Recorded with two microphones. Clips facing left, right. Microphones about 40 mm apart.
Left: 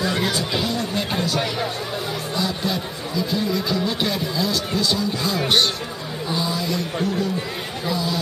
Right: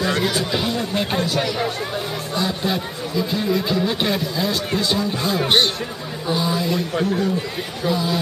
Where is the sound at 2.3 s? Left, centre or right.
Centre.